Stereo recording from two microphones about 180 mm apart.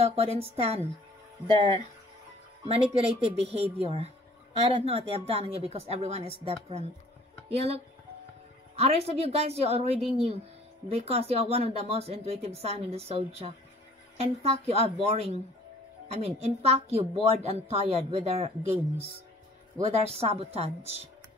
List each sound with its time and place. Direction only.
0.0 s speech: 35° right (ahead or behind)
2.6 s speech: 35° right (ahead or behind)
8.7 s speech: 35° right (ahead or behind)
19.8 s speech: 35° right (ahead or behind)